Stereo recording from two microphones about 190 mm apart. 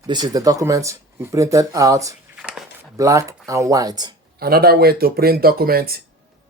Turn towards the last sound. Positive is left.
turn(degrees=-50)  # may be behind; listen again after turning